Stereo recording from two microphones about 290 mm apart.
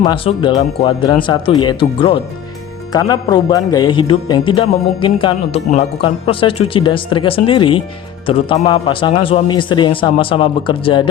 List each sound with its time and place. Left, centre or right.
0.0 s speech: centre